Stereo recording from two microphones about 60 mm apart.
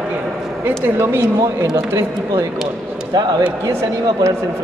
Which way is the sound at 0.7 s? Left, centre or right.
Right.